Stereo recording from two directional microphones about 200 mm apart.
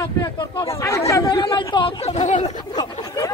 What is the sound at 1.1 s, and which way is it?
Speech, 20° left (ahead or behind).